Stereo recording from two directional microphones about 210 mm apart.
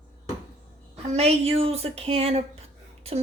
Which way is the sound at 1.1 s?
30° right (ahead or behind).